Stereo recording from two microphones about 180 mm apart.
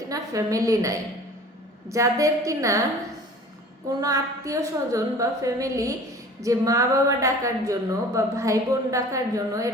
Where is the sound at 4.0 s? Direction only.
20° right (ahead or behind).